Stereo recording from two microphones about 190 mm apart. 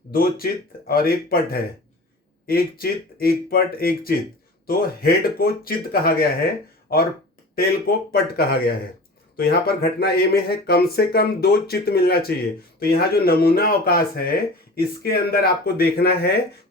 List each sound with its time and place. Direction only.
0.1 s speech: 55° left (ahead or behind)
7.5 s speech: 55° left (ahead or behind)